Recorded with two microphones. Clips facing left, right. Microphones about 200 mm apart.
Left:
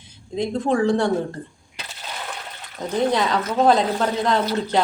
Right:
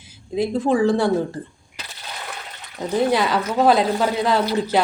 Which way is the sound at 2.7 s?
5° right (ahead or behind).